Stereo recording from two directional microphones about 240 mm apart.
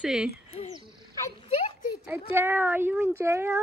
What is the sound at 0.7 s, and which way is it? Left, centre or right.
Owl, centre.